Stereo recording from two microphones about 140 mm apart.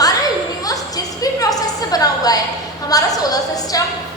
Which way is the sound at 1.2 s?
25° left (ahead or behind).